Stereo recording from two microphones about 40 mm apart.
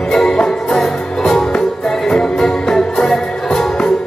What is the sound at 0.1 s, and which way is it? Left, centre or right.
Music, centre.